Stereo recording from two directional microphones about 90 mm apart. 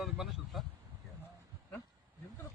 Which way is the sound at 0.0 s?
Centre (ahead or behind).